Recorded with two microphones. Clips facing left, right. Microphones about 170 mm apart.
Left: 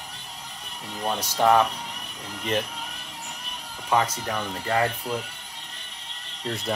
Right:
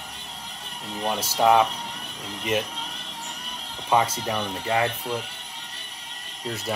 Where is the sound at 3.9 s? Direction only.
15° right (ahead or behind).